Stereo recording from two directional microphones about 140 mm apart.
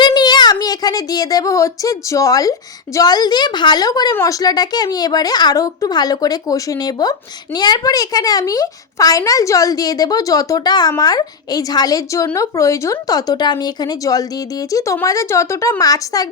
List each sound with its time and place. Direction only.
0.0 s a child's voice: 30° left (ahead or behind)